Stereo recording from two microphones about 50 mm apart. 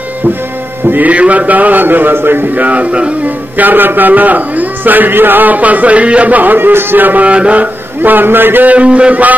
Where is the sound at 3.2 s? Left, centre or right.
Right.